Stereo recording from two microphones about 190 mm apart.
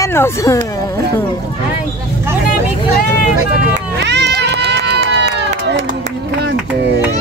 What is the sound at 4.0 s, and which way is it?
Run, 65° right (ahead or behind).